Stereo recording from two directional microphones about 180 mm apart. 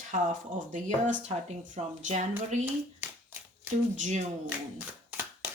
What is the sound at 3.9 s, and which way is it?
Speech, 40° right (ahead or behind).